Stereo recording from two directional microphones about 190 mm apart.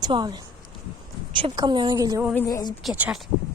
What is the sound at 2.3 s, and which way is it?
Speech, 20° left (ahead or behind).